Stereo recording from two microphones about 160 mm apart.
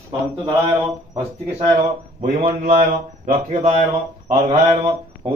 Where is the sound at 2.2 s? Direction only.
50° right (ahead or behind).